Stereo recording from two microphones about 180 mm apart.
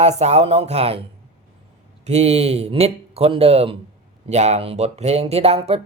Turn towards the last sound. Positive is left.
turn(degrees=-35)  # may be behind; listen again after turning